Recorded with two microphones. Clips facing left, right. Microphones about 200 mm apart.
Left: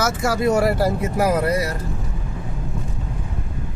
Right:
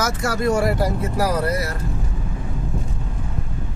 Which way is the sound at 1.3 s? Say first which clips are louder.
Left 3 dB; 15° left (ahead or behind).